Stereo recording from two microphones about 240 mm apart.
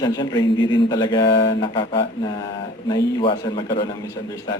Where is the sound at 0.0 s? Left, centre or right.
Centre.